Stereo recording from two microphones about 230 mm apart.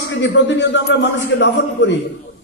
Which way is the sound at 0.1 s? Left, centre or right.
Left.